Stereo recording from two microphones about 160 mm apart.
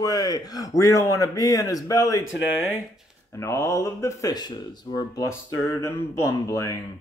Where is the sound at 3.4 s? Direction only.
20° left (ahead or behind).